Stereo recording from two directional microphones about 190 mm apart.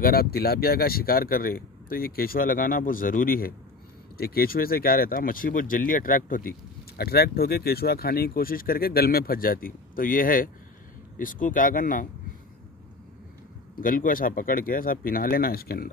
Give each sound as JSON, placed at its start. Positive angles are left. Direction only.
{"t": 0.0, "sound": "speech", "side_deg": 55}
{"t": 13.7, "sound": "speech", "side_deg": 50}